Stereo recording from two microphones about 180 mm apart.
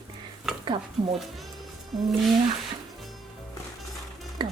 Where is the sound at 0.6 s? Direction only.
25° right (ahead or behind).